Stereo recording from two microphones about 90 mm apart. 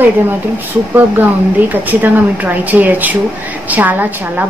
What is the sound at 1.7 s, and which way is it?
A woman's voice, 20° right (ahead or behind).